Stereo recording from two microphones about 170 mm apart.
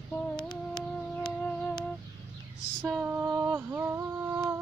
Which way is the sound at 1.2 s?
5° left (ahead or behind).